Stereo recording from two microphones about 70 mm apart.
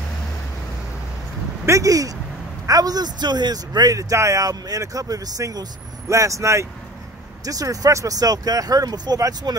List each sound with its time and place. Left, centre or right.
1.7 s speech: right
7.4 s speech: right